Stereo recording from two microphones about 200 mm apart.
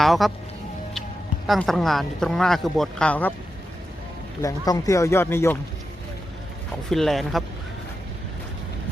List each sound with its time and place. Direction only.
0.0 s speech: centre (ahead or behind)
1.5 s speech: centre (ahead or behind)
4.4 s speech: 15° left (ahead or behind)
6.9 s speech: centre (ahead or behind)